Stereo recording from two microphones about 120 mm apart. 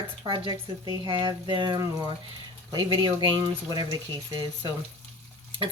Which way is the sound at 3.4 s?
35° right (ahead or behind).